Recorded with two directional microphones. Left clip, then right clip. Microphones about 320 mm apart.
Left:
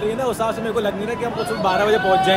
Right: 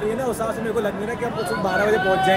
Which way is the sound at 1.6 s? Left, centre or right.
Centre.